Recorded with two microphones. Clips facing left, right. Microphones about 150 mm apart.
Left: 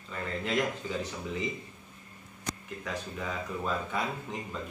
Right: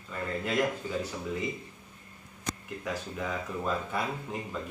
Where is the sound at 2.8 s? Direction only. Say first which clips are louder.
Right 2 dB; 5° right (ahead or behind).